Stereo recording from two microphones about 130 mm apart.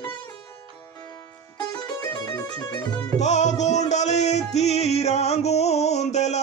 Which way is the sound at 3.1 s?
60° left (ahead or behind).